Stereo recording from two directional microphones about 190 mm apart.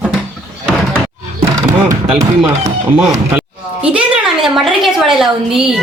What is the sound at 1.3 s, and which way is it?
Roar, 15° right (ahead or behind).